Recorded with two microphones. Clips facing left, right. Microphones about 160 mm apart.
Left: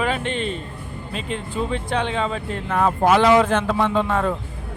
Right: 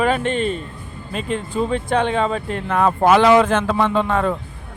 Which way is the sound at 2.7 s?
85° right.